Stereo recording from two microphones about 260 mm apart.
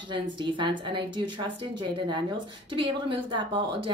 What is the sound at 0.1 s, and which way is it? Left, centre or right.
A woman's voice, centre.